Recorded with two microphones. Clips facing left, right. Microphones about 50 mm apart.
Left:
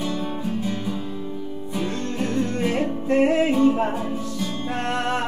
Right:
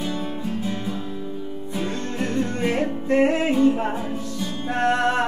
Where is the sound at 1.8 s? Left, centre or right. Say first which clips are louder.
Left 1 dB; centre.